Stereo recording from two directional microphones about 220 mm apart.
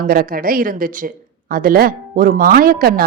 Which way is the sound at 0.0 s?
40° right (ahead or behind).